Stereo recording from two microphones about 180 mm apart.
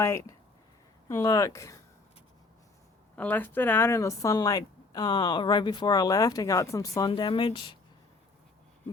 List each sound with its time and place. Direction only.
0.0 s speech: 15° left (ahead or behind)
3.2 s a woman's voice: 10° left (ahead or behind); by 7.8 s 30° left (ahead or behind)